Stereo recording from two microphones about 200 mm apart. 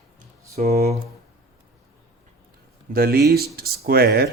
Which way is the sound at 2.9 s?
50° right (ahead or behind).